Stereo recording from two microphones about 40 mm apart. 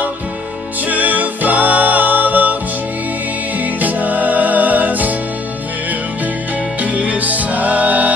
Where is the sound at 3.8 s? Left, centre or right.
Right.